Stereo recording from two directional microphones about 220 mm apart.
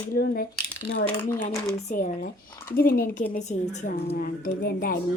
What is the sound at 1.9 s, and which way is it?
A woman's voice, 40° left (ahead or behind).